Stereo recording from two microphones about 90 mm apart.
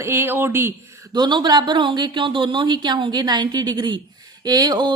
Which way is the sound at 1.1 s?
55° right (ahead or behind).